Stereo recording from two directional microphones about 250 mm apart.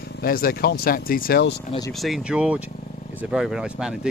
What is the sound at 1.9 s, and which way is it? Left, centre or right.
Speech, centre.